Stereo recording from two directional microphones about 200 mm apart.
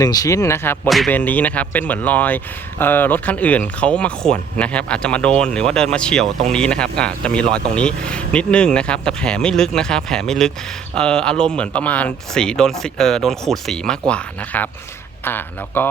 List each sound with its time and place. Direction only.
0.0 s speech: 20° left (ahead or behind)
0.9 s speech: centre (ahead or behind)